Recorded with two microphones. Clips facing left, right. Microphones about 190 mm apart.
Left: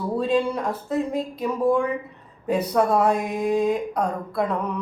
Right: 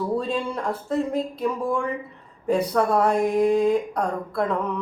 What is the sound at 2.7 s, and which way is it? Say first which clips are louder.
A woman's voice: left 3 dB; 5° left (ahead or behind).